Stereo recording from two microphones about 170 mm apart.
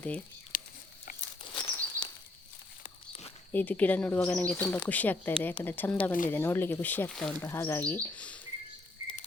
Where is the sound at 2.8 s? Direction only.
35° left (ahead or behind).